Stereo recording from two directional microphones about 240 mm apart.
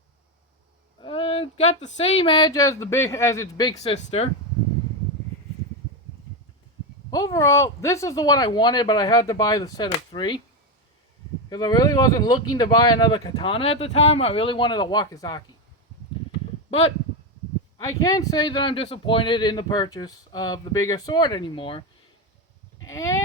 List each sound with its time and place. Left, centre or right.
1.0 s a sound: left
1.5 s speech: left
7.1 s speech: centre
11.4 s speech: centre
17.8 s speech: centre
22.8 s sheep: centre